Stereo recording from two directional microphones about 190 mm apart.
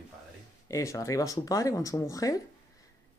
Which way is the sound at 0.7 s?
15° left (ahead or behind).